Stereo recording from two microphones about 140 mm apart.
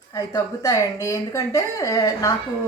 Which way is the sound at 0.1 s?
25° left (ahead or behind).